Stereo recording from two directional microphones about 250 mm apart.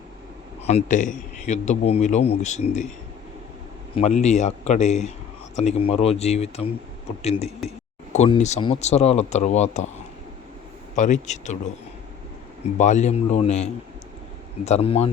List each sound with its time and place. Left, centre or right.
0.7 s speech: left
3.9 s speech: left
10.9 s speech: left
12.7 s speech: left